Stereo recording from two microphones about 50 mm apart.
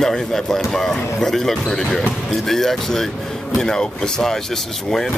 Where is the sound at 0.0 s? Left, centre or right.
Centre.